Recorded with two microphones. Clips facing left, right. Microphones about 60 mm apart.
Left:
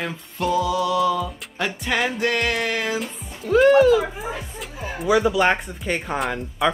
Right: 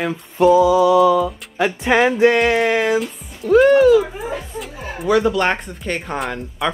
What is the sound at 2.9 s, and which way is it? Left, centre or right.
A child's voice, centre.